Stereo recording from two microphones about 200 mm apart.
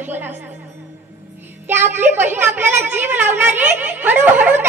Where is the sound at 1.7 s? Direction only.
10° right (ahead or behind).